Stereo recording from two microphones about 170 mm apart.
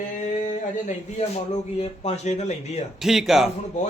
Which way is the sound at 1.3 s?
40° left (ahead or behind).